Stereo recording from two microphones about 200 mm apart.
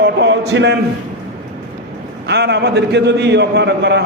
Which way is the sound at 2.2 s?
55° right (ahead or behind).